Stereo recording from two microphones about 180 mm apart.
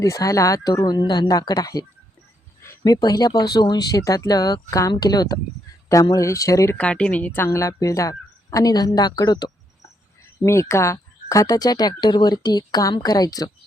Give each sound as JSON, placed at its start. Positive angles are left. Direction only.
{"t": 0.0, "sound": "speech", "side_deg": 20}